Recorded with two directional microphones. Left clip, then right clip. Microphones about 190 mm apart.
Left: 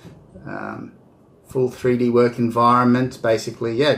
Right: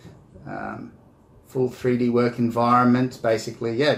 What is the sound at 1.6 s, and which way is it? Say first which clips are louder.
Speech: left 3 dB; 15° left (ahead or behind).